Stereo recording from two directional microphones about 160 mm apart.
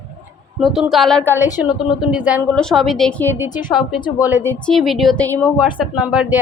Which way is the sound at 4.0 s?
25° left (ahead or behind).